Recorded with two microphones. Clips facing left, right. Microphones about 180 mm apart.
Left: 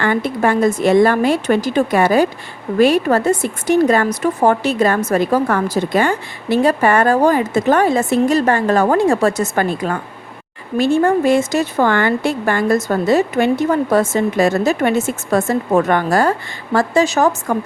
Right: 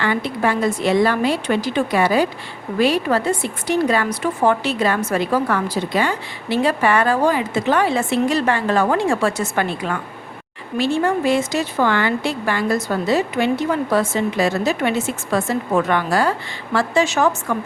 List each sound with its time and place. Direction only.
0.0 s a woman's voice: 50° left (ahead or behind)